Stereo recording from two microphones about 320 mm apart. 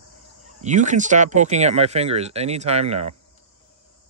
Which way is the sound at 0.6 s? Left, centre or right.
Right.